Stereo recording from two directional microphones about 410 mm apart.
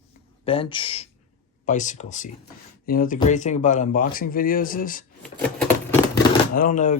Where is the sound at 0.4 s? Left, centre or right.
Centre.